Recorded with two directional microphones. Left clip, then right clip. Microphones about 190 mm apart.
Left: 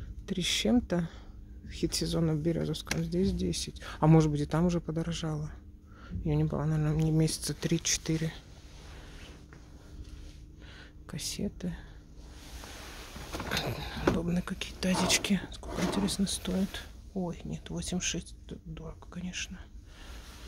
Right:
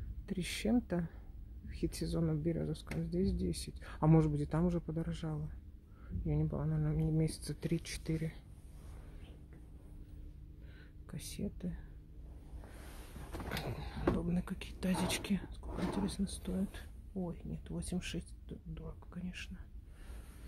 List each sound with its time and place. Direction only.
0.3 s speech: 5° left (ahead or behind)
10.8 s speech: 10° left (ahead or behind)
13.5 s speech: 10° left (ahead or behind)